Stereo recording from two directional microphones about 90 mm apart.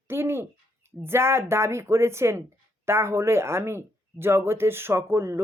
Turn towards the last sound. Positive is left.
turn(degrees=-30)  # may be behind; listen again after turning